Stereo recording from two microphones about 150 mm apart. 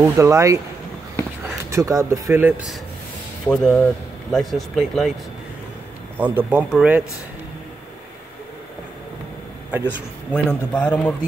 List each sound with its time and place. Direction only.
0.0 s speech: 20° right (ahead or behind)
1.7 s speech: 20° right (ahead or behind)
3.4 s speech: 5° left (ahead or behind)
6.1 s speech: 10° right (ahead or behind)
9.8 s a man's voice: 5° left (ahead or behind)